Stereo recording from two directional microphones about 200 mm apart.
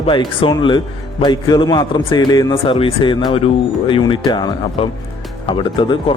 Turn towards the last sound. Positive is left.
turn(degrees=25)  # may be behind; listen again after turning